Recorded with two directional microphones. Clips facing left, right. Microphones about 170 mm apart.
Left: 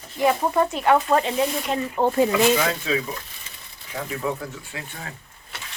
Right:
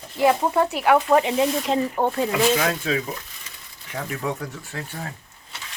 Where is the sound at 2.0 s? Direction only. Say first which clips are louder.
Left 3 dB; 5° left (ahead or behind).